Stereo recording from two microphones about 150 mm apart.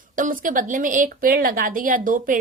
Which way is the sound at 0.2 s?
60° right (ahead or behind).